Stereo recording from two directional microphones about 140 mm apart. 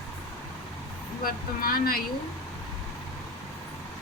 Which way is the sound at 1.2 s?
90° left.